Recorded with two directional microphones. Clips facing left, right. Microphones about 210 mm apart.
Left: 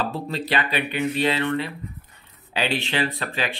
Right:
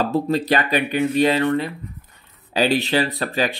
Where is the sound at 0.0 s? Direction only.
45° right (ahead or behind).